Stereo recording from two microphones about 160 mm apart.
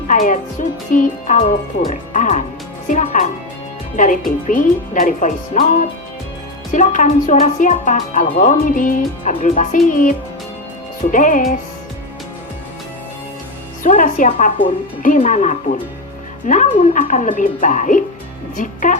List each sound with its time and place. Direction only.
0.1 s speech: 55° left (ahead or behind)
6.7 s speech: 55° left (ahead or behind)
13.8 s speech: 55° left (ahead or behind)